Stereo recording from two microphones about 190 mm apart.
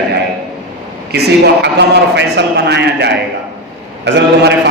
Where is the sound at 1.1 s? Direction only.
60° right (ahead or behind).